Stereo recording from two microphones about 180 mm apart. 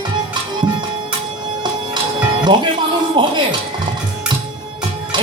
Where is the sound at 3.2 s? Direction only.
25° right (ahead or behind).